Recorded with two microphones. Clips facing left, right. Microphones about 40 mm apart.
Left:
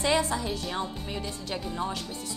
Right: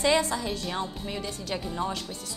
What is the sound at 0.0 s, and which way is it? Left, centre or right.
Speech, right.